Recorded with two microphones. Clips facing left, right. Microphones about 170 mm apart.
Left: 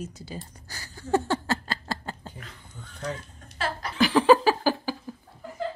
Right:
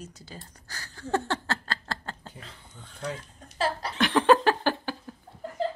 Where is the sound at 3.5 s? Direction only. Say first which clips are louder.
Right 2 dB; 35° right (ahead or behind).